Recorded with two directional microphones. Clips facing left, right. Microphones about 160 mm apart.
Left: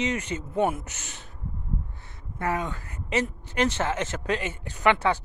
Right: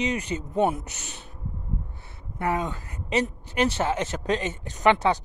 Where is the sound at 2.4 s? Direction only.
20° right (ahead or behind).